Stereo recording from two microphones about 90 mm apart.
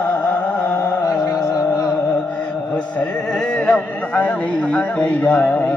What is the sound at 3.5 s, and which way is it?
A man's voice, 15° left (ahead or behind).